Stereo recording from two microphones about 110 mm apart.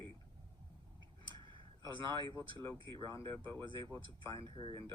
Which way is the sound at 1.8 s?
45° right (ahead or behind).